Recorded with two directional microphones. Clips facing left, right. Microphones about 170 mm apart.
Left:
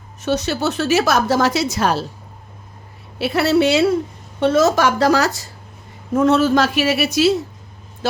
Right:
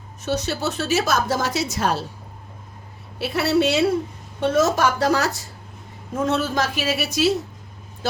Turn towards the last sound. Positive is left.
turn(degrees=80)